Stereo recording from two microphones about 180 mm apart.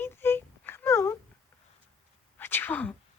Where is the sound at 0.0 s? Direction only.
10° left (ahead or behind).